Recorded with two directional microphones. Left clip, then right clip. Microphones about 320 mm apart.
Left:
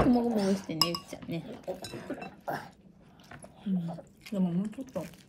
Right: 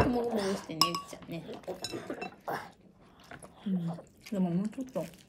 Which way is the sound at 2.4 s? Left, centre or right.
Centre.